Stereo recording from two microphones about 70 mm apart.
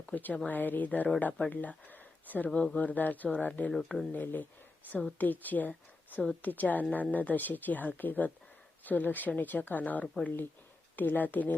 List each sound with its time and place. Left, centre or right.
0.0 s a woman's voice: left
3.7 s speech: centre
4.1 s a woman's voice: left